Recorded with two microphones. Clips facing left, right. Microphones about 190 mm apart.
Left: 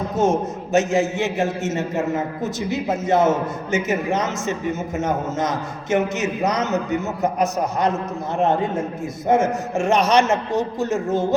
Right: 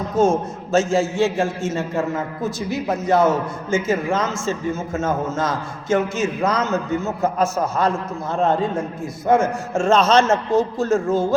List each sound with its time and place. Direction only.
0.2 s a man's voice: 20° left (ahead or behind)